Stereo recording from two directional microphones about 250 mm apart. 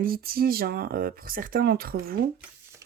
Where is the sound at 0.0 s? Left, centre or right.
Right.